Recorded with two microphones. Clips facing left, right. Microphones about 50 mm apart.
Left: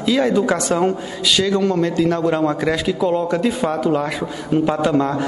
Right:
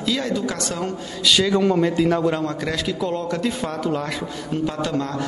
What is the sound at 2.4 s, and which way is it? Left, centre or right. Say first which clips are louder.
A man's voice: left 6 dB; centre.